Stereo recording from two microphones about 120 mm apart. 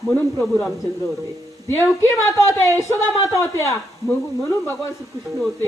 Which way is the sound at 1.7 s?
20° left (ahead or behind).